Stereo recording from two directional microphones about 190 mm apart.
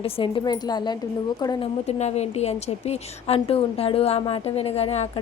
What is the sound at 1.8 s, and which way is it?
A woman's voice, 35° left (ahead or behind).